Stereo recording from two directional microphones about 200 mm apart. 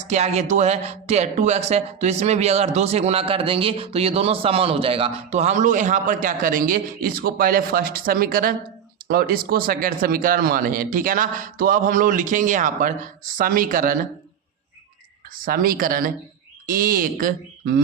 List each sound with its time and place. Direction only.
0.0 s speech: 35° right (ahead or behind)
15.4 s speech: 45° right (ahead or behind)